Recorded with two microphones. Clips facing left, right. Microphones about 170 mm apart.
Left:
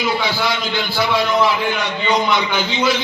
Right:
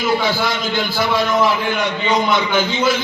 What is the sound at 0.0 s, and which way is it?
A man's voice, 50° right (ahead or behind).